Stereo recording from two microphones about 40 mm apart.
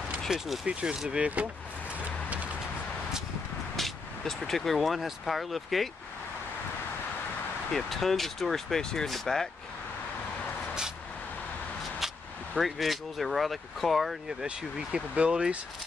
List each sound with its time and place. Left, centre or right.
0.3 s speech: centre; by 1.5 s right
2.2 s vehicle: right
3.7 s speech: centre
7.7 s speech: centre
12.0 s vehicle: centre
12.5 s speech: centre
14.4 s speech: right